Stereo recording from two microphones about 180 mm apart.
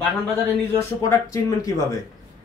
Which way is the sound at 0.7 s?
20° left (ahead or behind).